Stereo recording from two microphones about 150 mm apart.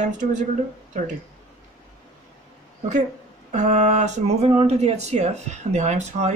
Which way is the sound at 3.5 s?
50° right (ahead or behind).